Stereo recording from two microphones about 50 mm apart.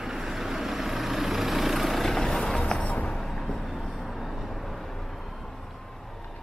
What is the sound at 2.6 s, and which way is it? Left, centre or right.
Music, centre.